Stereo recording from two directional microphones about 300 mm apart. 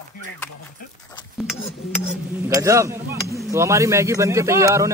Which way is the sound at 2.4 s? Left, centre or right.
Centre.